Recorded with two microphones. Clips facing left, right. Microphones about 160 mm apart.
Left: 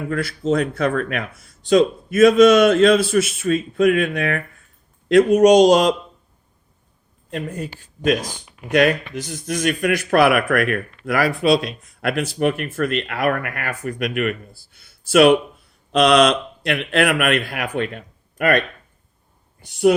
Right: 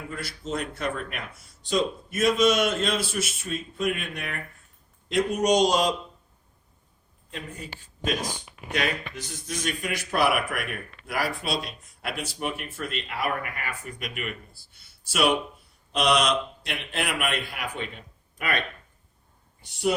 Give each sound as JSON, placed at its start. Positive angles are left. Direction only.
{"t": 0.1, "sound": "a man's voice", "side_deg": 85}
{"t": 7.3, "sound": "speech", "side_deg": 60}
{"t": 15.1, "sound": "a man's voice", "side_deg": 90}